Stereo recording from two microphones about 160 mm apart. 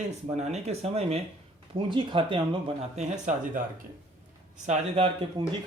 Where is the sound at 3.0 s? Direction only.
50° right (ahead or behind).